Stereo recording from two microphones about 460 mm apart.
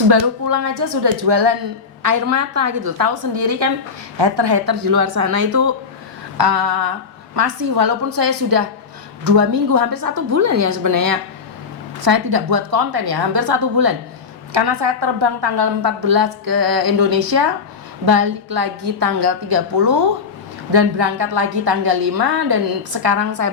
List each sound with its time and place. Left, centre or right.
0.1 s a woman's voice: right
0.7 s speech: right
2.0 s a woman's voice: right
3.3 s a woman's voice: right
6.3 s a woman's voice: right